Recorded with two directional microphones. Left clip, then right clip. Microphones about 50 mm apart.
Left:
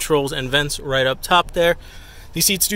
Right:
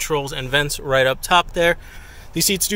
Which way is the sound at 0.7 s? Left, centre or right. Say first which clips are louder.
Right 2 dB; centre.